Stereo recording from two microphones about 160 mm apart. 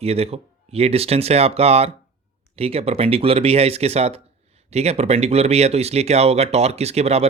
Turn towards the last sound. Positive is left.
turn(degrees=-40)  # may be behind; listen again after turning